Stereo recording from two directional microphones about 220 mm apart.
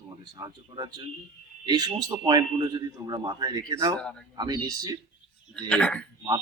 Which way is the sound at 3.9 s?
5° left (ahead or behind).